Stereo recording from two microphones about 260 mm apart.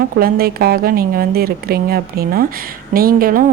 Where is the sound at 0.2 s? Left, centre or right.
Right.